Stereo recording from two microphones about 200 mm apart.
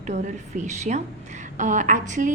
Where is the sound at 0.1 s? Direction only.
35° right (ahead or behind).